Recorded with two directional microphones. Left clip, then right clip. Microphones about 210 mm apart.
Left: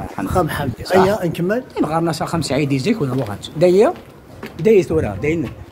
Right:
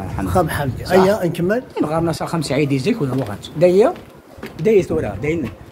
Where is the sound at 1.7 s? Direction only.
30° left (ahead or behind).